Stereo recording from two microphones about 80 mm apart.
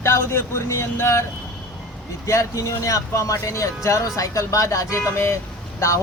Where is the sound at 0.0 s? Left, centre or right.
Left.